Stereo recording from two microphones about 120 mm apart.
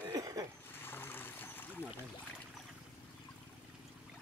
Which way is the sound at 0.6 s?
20° left (ahead or behind).